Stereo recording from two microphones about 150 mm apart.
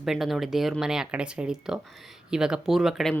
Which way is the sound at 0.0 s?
Centre (ahead or behind).